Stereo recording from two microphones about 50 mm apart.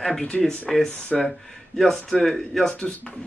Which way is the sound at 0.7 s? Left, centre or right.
Centre.